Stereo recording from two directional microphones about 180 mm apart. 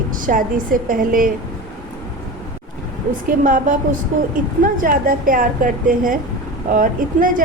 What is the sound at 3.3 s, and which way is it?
Speech, 50° right (ahead or behind).